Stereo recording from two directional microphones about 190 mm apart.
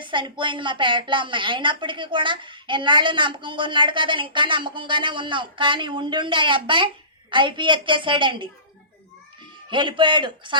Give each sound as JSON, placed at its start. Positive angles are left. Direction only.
{"t": 0.0, "sound": "a woman's voice", "side_deg": -25}
{"t": 9.6, "sound": "a woman's voice", "side_deg": -25}